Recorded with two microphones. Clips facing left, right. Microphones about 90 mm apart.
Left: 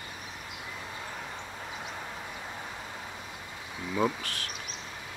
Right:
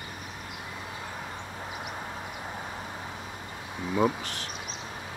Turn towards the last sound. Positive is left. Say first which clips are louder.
# right 3 dB
turn(degrees=-20)  # may be behind; listen again after turning